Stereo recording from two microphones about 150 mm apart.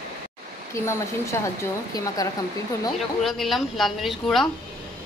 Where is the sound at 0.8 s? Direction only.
20° left (ahead or behind).